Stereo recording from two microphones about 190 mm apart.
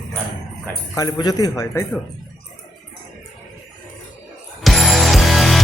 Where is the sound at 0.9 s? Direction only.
20° left (ahead or behind).